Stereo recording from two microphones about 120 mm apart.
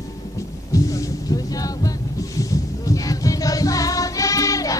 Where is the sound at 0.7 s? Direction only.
30° left (ahead or behind).